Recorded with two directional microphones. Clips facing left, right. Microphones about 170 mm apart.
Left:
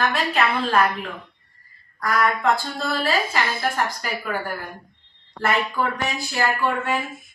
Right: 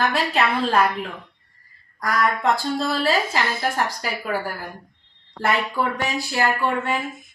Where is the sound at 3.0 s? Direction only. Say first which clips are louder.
Right 1 dB; 20° right (ahead or behind).